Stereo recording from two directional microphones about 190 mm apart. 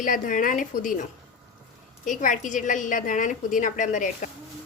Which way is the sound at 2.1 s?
40° left (ahead or behind).